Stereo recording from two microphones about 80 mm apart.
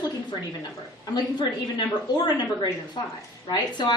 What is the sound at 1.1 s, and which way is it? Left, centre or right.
A woman's voice, left.